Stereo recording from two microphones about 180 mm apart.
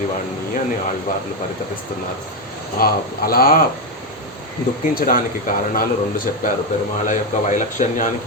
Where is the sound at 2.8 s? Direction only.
55° left (ahead or behind).